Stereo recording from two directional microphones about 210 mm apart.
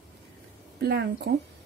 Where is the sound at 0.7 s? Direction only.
50° right (ahead or behind).